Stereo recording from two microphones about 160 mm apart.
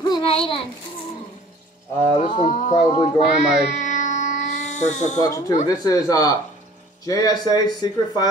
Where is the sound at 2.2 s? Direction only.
45° left (ahead or behind).